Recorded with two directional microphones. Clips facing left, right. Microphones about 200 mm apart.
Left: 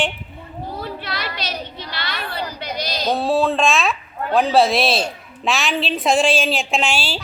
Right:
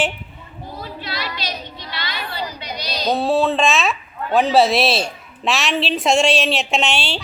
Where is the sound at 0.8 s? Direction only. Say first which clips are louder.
Right 1 dB; 60° left (ahead or behind).